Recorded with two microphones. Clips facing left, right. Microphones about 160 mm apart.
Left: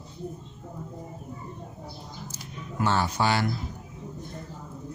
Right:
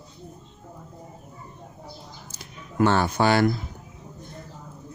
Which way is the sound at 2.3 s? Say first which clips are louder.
Right 7 dB; 60° right (ahead or behind).